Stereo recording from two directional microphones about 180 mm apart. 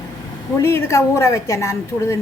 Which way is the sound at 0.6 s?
15° left (ahead or behind).